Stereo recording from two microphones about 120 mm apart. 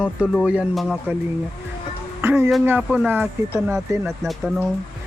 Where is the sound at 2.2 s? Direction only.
20° right (ahead or behind).